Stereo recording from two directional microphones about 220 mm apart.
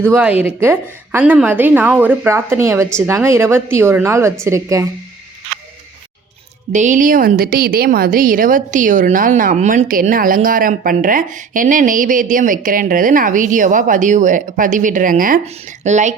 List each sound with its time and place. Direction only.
0.1 s a woman's voice: 5° right (ahead or behind)
6.7 s a woman's voice: 35° right (ahead or behind)